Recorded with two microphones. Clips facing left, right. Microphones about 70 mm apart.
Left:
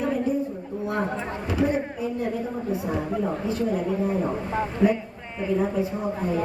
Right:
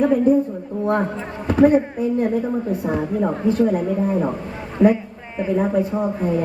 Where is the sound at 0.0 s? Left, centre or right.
Right.